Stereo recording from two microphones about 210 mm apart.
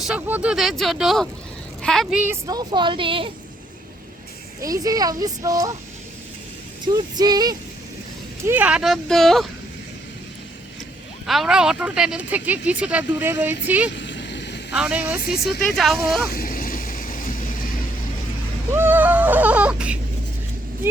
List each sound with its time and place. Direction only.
0.1 s speech: 5° right (ahead or behind); by 3.2 s 25° right (ahead or behind)
4.6 s speech: 15° right (ahead or behind)
6.8 s speech: 20° right (ahead or behind)
8.4 s speech: 5° right (ahead or behind)
11.3 s speech: centre (ahead or behind)
13.9 s vehicle: 60° left (ahead or behind)
14.7 s speech: 5° right (ahead or behind)
15.2 s speech: 45° left (ahead or behind)
15.7 s speech: centre (ahead or behind)
16.3 s vehicle: 45° left (ahead or behind)
18.7 s speech: 10° right (ahead or behind)